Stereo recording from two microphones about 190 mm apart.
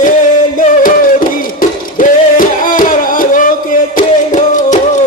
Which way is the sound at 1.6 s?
45° left (ahead or behind).